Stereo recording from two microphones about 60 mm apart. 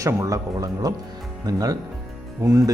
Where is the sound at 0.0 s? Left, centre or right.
Right.